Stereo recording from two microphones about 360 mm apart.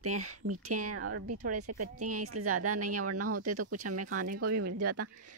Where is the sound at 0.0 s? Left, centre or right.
Right.